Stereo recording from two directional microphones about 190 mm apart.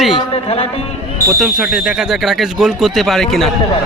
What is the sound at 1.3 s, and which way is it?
Speech, centre (ahead or behind).